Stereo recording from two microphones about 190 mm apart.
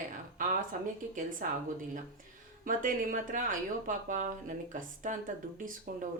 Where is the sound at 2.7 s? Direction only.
45° right (ahead or behind).